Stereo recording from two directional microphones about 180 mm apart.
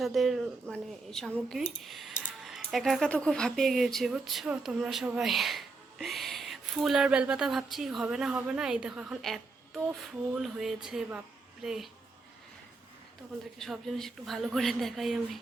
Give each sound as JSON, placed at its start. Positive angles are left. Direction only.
{"t": 0.0, "sound": "speech", "side_deg": 0}
{"t": 13.6, "sound": "speech", "side_deg": 0}